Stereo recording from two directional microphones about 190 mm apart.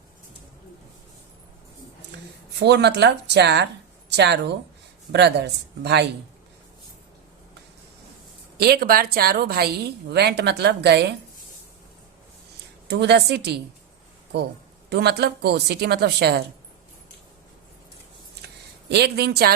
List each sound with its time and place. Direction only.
2.6 s a woman's voice: 65° right (ahead or behind)
8.5 s a woman's voice: 55° right (ahead or behind)
12.9 s a woman's voice: 60° right (ahead or behind)
14.8 s a woman's voice: 60° right (ahead or behind)
18.4 s a sound: 60° right (ahead or behind)